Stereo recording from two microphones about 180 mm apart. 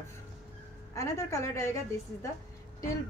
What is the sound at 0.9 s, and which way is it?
Speech, 15° left (ahead or behind).